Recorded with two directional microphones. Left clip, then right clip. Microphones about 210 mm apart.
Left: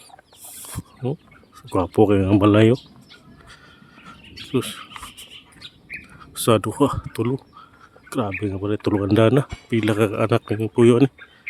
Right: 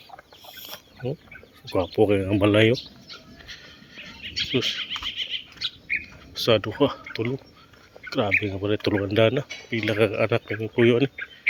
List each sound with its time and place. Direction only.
0.6 s a sound: 40° left (ahead or behind)
1.7 s speech: 30° left (ahead or behind)
3.9 s bird: 20° left (ahead or behind)
6.4 s speech: 35° left (ahead or behind)